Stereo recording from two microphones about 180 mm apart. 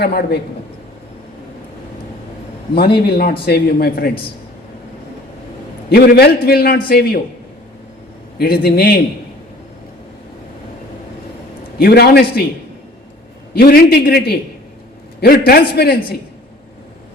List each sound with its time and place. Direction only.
0.0 s a man's voice: 60° left (ahead or behind)
3.1 s a man's voice: 60° left (ahead or behind)
5.9 s a man's voice: 60° left (ahead or behind)
8.4 s a man's voice: 60° left (ahead or behind)
11.8 s a man's voice: 60° left (ahead or behind)
13.5 s a man's voice: 60° left (ahead or behind)